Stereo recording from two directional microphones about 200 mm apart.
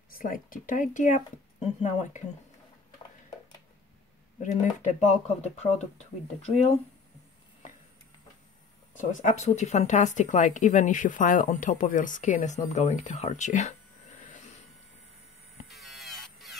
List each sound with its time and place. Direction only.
0.1 s speech: 45° left (ahead or behind)
4.4 s speech: 35° left (ahead or behind)
8.9 s speech: 35° left (ahead or behind)
15.7 s a sound: centre (ahead or behind)